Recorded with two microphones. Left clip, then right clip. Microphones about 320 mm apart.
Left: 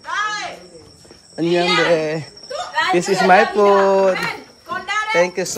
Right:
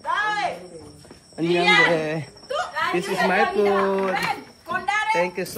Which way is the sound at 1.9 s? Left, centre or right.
Centre.